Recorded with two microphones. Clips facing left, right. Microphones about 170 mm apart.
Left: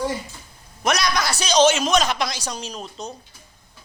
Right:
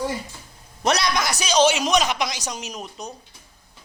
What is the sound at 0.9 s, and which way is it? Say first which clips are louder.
A man's voice: even; 25° right (ahead or behind).